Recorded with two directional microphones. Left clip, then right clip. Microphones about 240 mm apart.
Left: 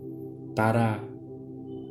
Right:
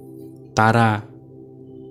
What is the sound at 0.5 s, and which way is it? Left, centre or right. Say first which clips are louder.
Mantra: right 9 dB; right.